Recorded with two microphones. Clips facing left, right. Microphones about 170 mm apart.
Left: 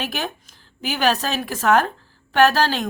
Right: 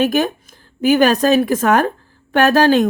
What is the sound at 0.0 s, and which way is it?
Speech, 50° right (ahead or behind).